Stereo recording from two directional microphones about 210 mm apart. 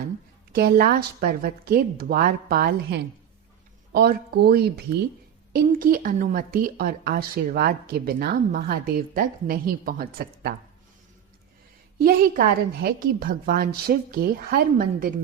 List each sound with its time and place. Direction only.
0.5 s a woman's voice: 45° right (ahead or behind)
11.9 s a woman's voice: 45° right (ahead or behind)